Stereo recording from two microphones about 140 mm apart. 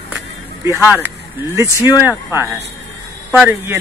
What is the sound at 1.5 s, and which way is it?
Speech, 20° right (ahead or behind).